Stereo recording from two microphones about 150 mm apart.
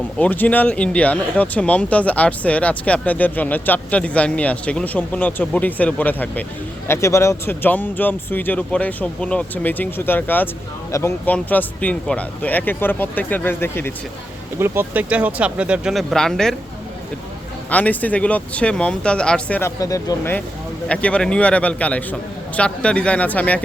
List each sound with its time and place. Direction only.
0.2 s speech: 10° left (ahead or behind)
14.6 s speech: 10° right (ahead or behind); by 16.6 s 5° left (ahead or behind)
17.7 s speech: 10° left (ahead or behind)
19.8 s speech: 20° left (ahead or behind)
20.8 s speech: 10° left (ahead or behind)